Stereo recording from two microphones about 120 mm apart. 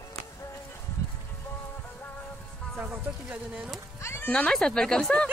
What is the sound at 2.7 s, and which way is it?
Speech, 10° right (ahead or behind).